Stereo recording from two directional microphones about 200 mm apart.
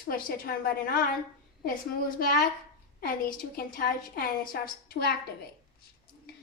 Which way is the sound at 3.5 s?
50° left (ahead or behind).